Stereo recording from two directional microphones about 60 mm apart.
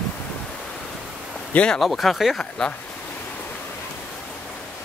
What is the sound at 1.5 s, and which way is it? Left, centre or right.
Speech, centre.